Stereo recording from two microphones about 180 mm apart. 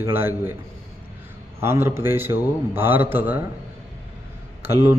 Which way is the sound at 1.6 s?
15° right (ahead or behind).